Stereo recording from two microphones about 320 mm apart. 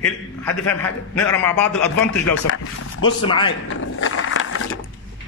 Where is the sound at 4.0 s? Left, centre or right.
Left.